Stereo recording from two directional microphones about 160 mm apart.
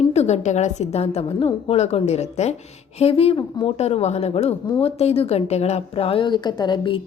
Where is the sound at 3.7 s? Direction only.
40° left (ahead or behind).